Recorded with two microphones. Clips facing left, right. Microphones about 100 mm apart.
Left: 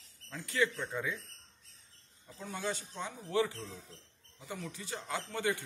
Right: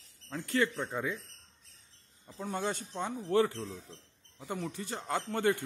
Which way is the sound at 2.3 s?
50° right (ahead or behind).